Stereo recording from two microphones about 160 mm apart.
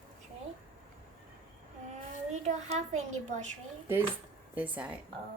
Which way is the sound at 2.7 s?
45° right (ahead or behind).